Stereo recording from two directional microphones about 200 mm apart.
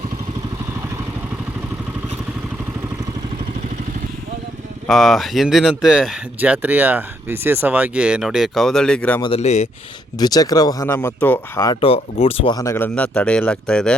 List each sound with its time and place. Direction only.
4.9 s speech: centre (ahead or behind)
9.2 s speech: 30° left (ahead or behind)
10.2 s speech: 20° left (ahead or behind)